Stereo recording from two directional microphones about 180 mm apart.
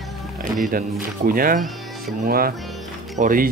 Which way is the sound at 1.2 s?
50° right (ahead or behind).